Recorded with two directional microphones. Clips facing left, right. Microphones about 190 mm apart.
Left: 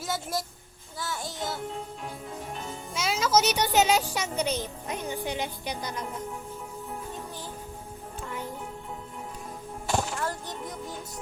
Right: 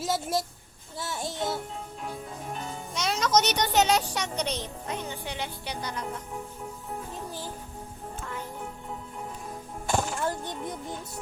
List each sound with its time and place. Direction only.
0.0 s a child's voice: centre (ahead or behind)
2.9 s a child's voice: centre (ahead or behind)
4.9 s speech: 15° left (ahead or behind)
9.9 s music: centre (ahead or behind)
10.2 s speech: 20° right (ahead or behind)